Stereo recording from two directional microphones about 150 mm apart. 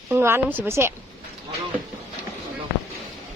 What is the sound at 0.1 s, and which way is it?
Speech, 15° right (ahead or behind).